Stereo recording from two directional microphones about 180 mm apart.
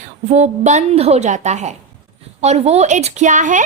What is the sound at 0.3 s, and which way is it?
A woman's voice, 40° right (ahead or behind).